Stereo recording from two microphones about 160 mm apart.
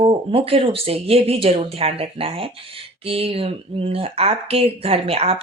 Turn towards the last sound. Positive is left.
turn(degrees=-40)  # may be behind; listen again after turning